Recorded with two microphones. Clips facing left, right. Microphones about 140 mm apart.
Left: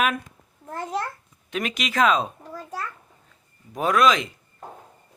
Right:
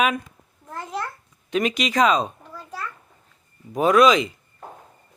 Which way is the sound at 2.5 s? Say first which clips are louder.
Left 3 dB; 40° left (ahead or behind).